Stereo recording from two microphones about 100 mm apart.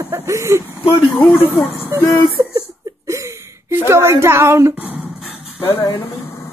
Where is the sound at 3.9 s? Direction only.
30° right (ahead or behind).